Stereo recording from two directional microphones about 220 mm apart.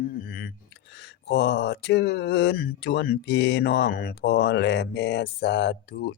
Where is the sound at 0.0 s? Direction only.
40° left (ahead or behind).